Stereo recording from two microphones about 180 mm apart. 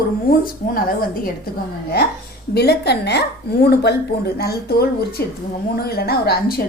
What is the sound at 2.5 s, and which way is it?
A woman's voice, 65° left (ahead or behind).